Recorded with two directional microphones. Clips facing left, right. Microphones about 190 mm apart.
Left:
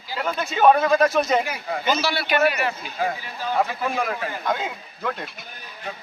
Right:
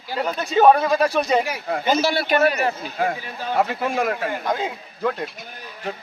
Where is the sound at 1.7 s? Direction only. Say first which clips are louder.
Right 3 dB; 50° right (ahead or behind).